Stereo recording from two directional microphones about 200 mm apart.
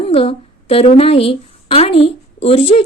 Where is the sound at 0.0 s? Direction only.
30° left (ahead or behind).